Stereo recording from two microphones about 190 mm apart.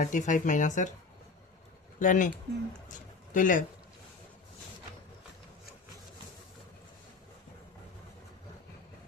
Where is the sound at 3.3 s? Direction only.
45° left (ahead or behind).